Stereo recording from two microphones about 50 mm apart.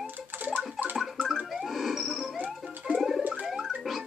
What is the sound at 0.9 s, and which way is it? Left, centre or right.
Gargling, centre.